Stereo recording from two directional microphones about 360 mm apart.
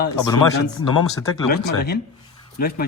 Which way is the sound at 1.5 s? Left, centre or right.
Left.